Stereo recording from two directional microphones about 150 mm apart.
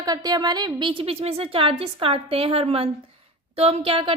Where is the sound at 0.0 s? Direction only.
25° right (ahead or behind).